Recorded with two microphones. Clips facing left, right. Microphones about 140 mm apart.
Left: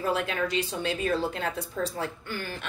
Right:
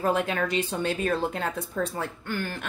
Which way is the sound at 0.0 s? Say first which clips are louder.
Right 3 dB; 50° right (ahead or behind).